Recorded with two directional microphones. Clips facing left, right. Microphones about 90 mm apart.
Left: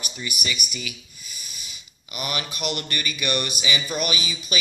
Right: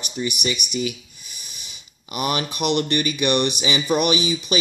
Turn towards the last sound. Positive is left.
turn(degrees=-25)  # may be behind; listen again after turning